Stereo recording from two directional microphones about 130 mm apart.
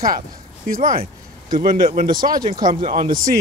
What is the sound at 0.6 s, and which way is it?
Speech, 90° right.